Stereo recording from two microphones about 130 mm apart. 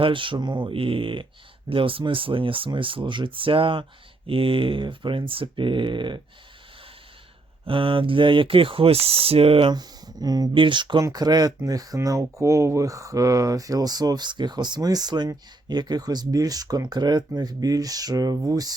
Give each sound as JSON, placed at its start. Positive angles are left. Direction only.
{"t": 0.0, "sound": "speech", "side_deg": -40}
{"t": 7.6, "sound": "speech", "side_deg": -40}
{"t": 9.7, "sound": "speech", "side_deg": -30}